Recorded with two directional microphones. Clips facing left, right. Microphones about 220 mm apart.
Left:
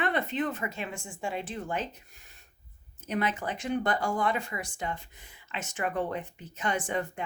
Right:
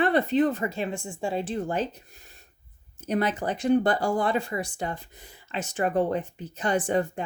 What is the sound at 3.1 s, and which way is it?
Speech, 35° right (ahead or behind).